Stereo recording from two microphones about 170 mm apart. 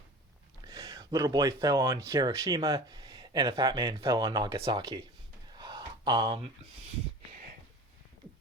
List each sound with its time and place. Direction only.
0.6 s speech: 20° right (ahead or behind)
4.5 s speech: 35° right (ahead or behind)
4.8 s speech: 25° right (ahead or behind)
5.5 s gasp: 25° right (ahead or behind)